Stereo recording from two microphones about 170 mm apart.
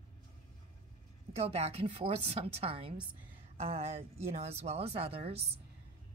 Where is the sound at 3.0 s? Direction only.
10° right (ahead or behind).